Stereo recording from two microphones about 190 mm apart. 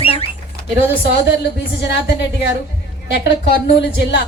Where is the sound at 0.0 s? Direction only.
30° left (ahead or behind).